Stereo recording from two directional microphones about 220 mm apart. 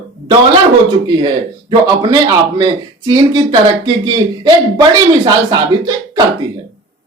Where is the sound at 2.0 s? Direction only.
20° right (ahead or behind).